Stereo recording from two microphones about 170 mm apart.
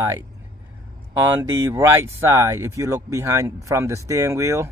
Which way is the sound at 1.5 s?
15° right (ahead or behind).